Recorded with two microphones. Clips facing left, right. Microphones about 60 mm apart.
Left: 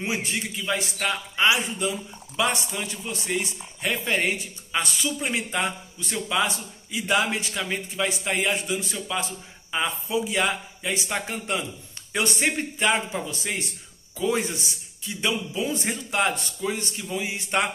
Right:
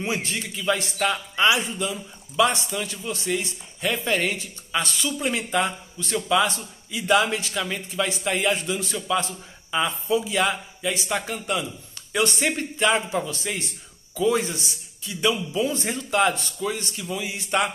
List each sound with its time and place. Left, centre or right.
0.0 s speech: centre
0.9 s speech: centre
1.8 s speech: left
9.7 s speech: centre